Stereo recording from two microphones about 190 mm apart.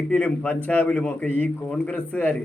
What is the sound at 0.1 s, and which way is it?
A man's voice, 5° left (ahead or behind).